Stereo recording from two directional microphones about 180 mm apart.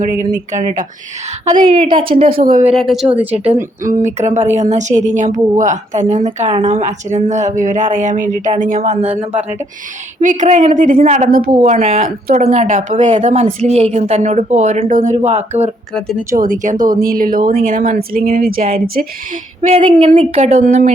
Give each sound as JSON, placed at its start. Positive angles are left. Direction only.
{"t": 0.0, "sound": "speech", "side_deg": -45}
{"t": 1.8, "sound": "a woman's voice", "side_deg": -30}
{"t": 2.3, "sound": "speech", "side_deg": -50}
{"t": 2.7, "sound": "a woman's voice", "side_deg": 0}
{"t": 3.3, "sound": "speech", "side_deg": -35}
{"t": 6.5, "sound": "speech", "side_deg": -30}
{"t": 10.2, "sound": "speech", "side_deg": -45}
{"t": 11.6, "sound": "speech", "side_deg": -35}
{"t": 16.3, "sound": "speech", "side_deg": -50}
{"t": 19.6, "sound": "speech", "side_deg": -35}